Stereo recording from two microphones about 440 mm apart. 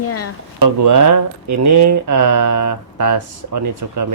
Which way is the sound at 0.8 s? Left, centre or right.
Right.